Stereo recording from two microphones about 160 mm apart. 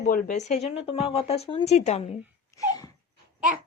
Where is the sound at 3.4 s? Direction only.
10° right (ahead or behind).